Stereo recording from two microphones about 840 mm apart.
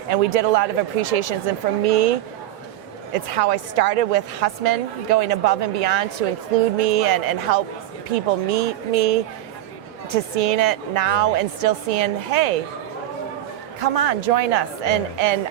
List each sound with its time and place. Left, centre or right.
0.1 s a woman's voice: right
13.7 s a woman's voice: right